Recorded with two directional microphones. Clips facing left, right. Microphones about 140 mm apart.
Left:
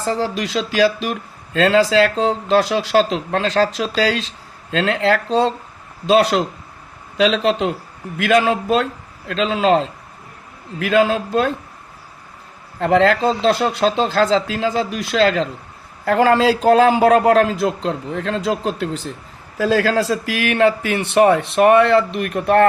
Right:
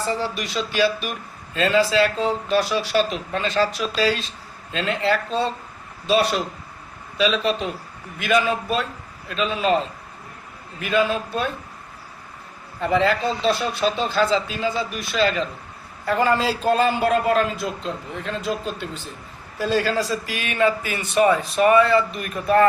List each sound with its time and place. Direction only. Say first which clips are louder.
0.0 s speech: left 4 dB; 90° left
12.8 s a man's voice: left 5 dB; 90° left; by 22.6 s 70° left (ahead or behind)